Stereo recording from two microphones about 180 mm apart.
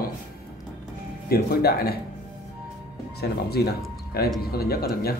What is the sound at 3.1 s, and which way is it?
Speech, 60° left (ahead or behind).